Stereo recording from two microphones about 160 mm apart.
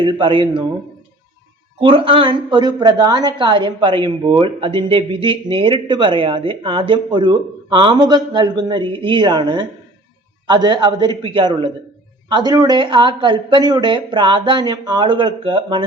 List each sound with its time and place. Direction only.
0.0 s a woman's voice: 30° right (ahead or behind)
1.8 s a woman's voice: 35° right (ahead or behind)